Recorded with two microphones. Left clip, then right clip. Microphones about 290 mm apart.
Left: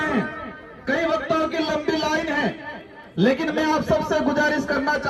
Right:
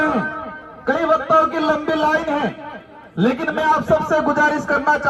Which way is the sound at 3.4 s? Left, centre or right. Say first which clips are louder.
Right 5 dB; centre.